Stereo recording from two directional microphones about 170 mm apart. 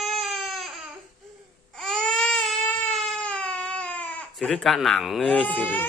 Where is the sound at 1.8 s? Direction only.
5° left (ahead or behind).